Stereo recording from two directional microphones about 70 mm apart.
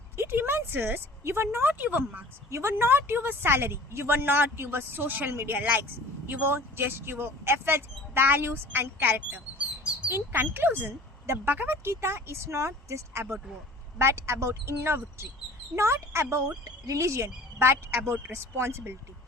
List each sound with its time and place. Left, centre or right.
0.2 s a woman's voice: right
1.5 s speech: right
2.5 s speech: right
5.3 s speech: right
5.5 s speech: right